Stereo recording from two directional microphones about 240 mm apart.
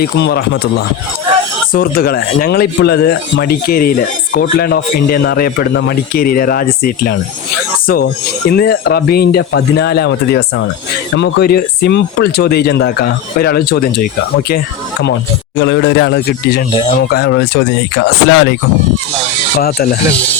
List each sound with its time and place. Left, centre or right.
0.0 s speech: left
1.7 s speech: left
8.4 s speech: left
15.5 s speech: left
16.7 s speech: left
19.5 s speech: left